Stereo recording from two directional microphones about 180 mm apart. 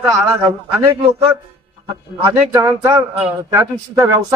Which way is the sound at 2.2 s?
20° right (ahead or behind).